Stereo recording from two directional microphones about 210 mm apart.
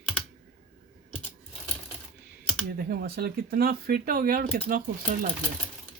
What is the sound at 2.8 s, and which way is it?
Speech, 45° right (ahead or behind).